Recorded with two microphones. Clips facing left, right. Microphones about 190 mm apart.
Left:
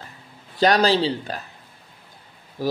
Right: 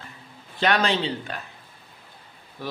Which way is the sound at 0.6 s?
35° left (ahead or behind).